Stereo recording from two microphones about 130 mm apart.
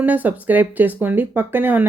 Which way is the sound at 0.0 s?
15° right (ahead or behind).